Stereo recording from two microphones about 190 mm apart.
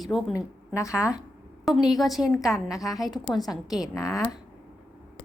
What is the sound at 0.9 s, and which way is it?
A woman's voice, 5° right (ahead or behind).